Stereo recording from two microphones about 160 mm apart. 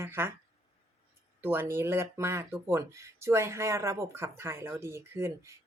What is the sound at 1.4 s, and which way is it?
Speech, 15° right (ahead or behind).